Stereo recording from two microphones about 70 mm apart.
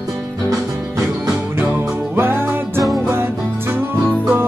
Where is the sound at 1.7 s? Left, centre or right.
Right.